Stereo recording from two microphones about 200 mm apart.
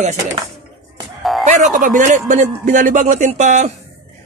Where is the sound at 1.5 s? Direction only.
40° right (ahead or behind).